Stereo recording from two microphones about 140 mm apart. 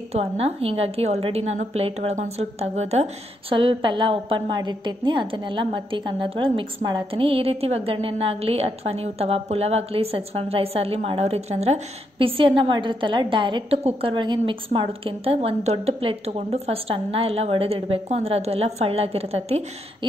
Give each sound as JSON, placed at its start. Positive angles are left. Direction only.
{"t": 0.1, "sound": "a woman's voice", "side_deg": -45}